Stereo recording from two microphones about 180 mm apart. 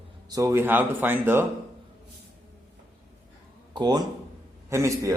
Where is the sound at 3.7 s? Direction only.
25° right (ahead or behind).